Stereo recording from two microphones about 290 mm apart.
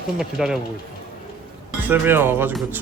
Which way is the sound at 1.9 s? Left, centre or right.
Centre.